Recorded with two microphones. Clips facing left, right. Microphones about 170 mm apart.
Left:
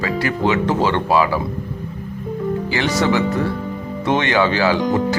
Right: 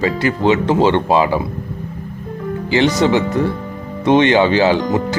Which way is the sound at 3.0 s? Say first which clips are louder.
Right 3 dB; 20° right (ahead or behind).